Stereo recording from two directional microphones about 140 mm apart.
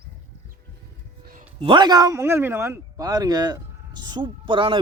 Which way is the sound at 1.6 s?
35° right (ahead or behind).